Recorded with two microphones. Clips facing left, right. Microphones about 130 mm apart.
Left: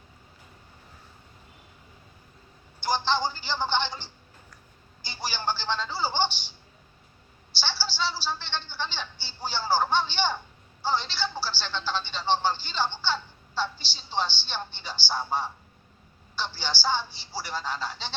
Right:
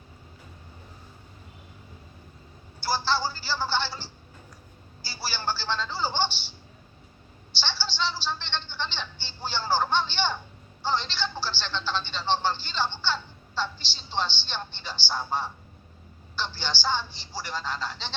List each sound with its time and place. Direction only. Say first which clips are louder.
2.8 s speech: left 1 dB; 15° left (ahead or behind)
7.5 s speech: even; 10° left (ahead or behind)